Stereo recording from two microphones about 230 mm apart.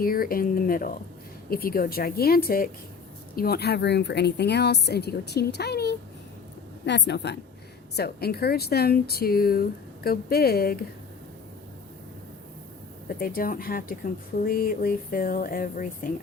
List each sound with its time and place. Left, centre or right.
0.0 s speech: left
13.1 s speech: left